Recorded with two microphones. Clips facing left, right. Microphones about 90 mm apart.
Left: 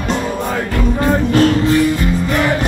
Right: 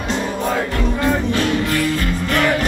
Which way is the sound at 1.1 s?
40° left (ahead or behind).